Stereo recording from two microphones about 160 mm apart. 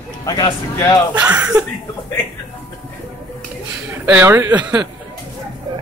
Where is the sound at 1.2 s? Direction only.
10° right (ahead or behind).